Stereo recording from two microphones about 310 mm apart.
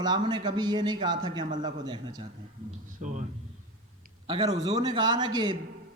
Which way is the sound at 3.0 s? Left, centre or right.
Right.